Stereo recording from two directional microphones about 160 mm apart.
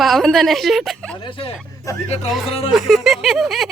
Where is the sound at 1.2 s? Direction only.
35° left (ahead or behind).